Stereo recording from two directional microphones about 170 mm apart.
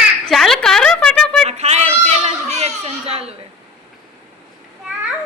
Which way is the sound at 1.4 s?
40° right (ahead or behind).